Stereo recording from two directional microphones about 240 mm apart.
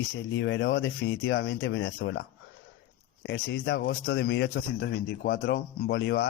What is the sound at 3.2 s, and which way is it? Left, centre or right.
A man's voice, left.